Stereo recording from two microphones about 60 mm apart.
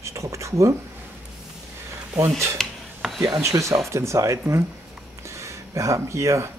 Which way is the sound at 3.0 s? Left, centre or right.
Centre.